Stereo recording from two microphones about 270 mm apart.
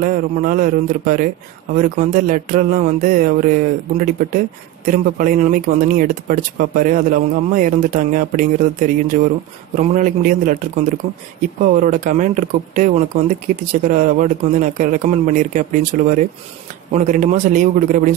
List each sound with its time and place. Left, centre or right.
0.0 s speech: right
13.9 s speech: right